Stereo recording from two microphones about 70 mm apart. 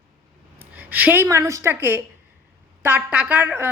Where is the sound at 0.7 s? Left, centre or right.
Right.